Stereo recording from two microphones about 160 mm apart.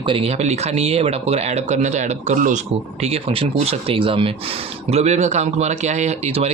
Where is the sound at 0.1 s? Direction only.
40° right (ahead or behind).